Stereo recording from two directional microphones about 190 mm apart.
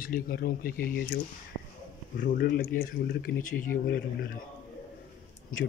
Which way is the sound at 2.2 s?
60° left (ahead or behind).